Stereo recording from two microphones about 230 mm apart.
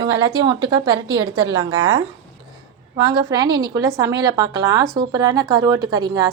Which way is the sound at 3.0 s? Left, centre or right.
Centre.